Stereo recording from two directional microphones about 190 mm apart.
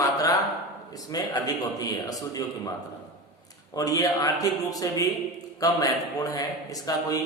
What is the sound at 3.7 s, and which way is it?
A man's voice, 20° left (ahead or behind).